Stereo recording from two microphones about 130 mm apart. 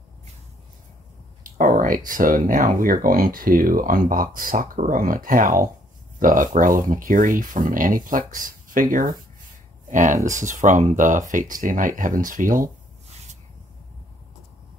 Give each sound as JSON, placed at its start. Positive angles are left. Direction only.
{"t": 1.4, "sound": "speech", "side_deg": -90}
{"t": 9.8, "sound": "speech", "side_deg": -75}